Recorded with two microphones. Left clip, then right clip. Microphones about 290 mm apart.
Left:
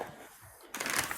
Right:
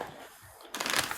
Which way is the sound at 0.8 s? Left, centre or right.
Centre.